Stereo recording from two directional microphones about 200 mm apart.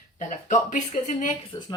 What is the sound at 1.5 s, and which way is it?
Speech, 15° left (ahead or behind).